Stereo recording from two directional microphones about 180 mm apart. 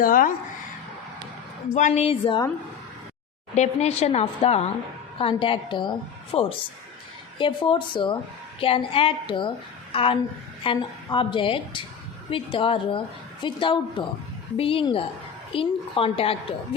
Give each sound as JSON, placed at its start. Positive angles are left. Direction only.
{"t": 0.0, "sound": "a woman's voice", "side_deg": 50}
{"t": 1.7, "sound": "a woman's voice", "side_deg": 40}
{"t": 3.5, "sound": "a woman's voice", "side_deg": 40}